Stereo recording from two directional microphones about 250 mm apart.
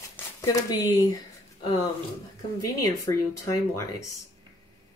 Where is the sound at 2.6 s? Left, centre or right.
Left.